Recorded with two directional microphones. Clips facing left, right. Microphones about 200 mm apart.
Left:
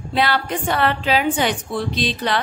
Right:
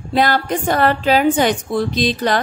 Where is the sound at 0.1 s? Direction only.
45° right (ahead or behind).